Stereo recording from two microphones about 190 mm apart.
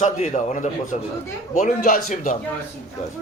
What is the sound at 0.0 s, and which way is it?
A man's voice, 40° left (ahead or behind).